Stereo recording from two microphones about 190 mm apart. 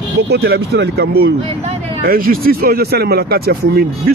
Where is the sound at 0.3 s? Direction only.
60° right (ahead or behind).